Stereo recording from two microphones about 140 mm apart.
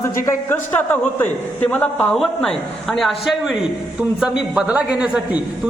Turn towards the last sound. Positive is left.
turn(degrees=-5)  # may be behind; listen again after turning